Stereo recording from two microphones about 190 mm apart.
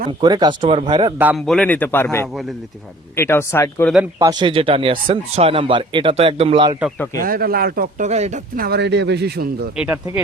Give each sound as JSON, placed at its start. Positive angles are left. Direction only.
{"t": 0.2, "sound": "speech", "side_deg": -25}
{"t": 1.4, "sound": "speech", "side_deg": 5}
{"t": 4.2, "sound": "speech", "side_deg": -20}
{"t": 7.2, "sound": "speech", "side_deg": -50}
{"t": 8.5, "sound": "speech", "side_deg": -55}
{"t": 9.7, "sound": "speech", "side_deg": -5}